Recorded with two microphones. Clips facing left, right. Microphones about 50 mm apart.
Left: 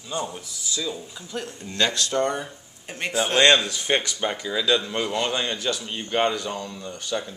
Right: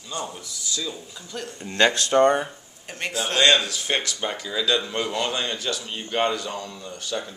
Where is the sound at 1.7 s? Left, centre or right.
Right.